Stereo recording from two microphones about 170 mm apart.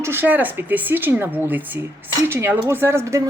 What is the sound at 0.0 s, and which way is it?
A woman's voice, 10° right (ahead or behind).